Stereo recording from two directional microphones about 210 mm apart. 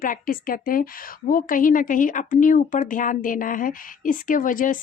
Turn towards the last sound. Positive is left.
turn(degrees=40)  # may be behind; listen again after turning